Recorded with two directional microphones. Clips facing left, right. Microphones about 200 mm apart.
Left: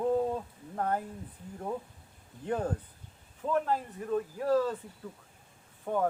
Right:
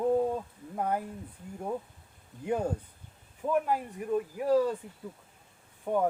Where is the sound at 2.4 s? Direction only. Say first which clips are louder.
Right 2 dB; 10° right (ahead or behind).